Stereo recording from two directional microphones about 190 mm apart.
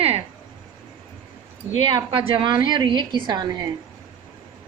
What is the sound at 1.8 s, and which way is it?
A woman's voice, 25° right (ahead or behind).